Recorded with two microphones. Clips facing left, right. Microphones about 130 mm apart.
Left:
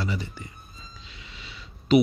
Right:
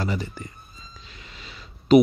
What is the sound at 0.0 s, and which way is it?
Speech, 45° right (ahead or behind).